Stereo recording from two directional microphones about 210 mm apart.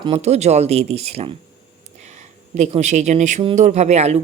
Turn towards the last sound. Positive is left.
turn(degrees=-30)  # may be behind; listen again after turning